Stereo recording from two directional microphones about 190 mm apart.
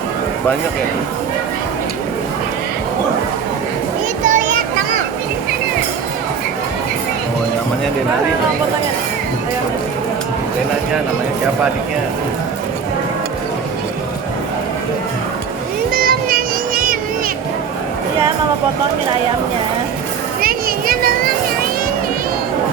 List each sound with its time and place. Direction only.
4.2 s children playing: 40° right (ahead or behind)
15.9 s music: 50° right (ahead or behind)
20.4 s children playing: 50° right (ahead or behind)